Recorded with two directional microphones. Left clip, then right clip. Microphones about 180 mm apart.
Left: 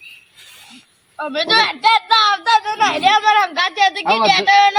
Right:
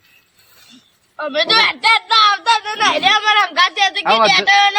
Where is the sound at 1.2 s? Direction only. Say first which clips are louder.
Right 1 dB; 20° right (ahead or behind).